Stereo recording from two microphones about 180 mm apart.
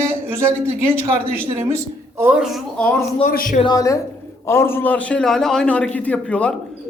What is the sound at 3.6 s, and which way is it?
A woman's voice, 20° left (ahead or behind).